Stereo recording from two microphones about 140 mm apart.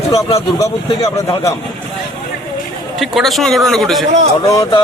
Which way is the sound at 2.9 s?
Centre (ahead or behind).